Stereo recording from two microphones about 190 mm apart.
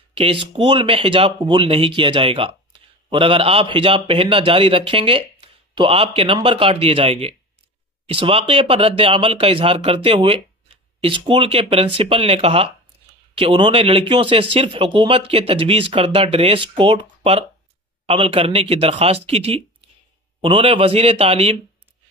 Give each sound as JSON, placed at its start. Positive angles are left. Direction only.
{"t": 0.1, "sound": "speech", "side_deg": -30}